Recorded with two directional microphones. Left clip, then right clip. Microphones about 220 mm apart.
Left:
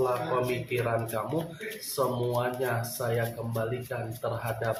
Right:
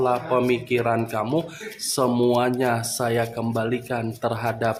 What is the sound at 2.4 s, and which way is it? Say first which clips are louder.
Speech: right 8 dB; 50° right (ahead or behind).